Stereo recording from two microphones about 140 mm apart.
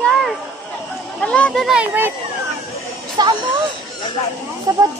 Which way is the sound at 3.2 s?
30° right (ahead or behind).